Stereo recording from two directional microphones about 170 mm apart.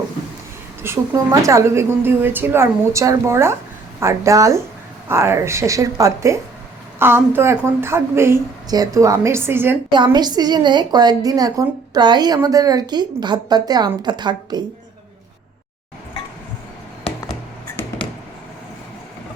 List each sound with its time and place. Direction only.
0.8 s a woman's voice: 15° right (ahead or behind)
9.9 s a woman's voice: 25° right (ahead or behind)
17.7 s a sound: 5° left (ahead or behind)